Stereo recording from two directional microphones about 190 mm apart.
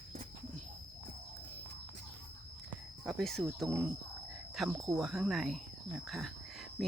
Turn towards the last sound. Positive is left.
turn(degrees=0)  # may be behind; listen again after turning